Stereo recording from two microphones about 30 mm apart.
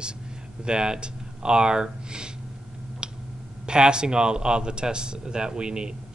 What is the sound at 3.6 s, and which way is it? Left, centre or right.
Speech, right.